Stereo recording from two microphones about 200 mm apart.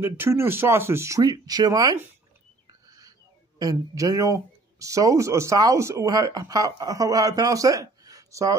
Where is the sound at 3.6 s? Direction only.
15° right (ahead or behind).